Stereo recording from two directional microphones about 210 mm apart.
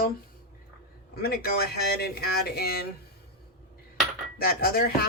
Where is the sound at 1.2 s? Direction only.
50° left (ahead or behind).